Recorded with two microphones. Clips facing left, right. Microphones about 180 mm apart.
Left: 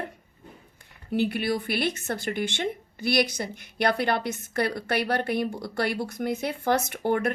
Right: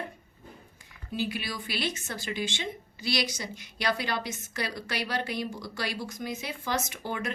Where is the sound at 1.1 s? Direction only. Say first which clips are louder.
Left 8 dB; 60° left (ahead or behind).